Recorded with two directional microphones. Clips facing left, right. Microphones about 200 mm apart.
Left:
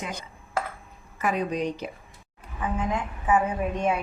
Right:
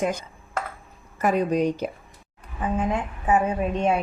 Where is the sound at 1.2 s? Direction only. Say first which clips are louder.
Right 5 dB; 45° right (ahead or behind).